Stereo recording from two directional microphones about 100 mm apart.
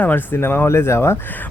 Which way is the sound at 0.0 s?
20° left (ahead or behind).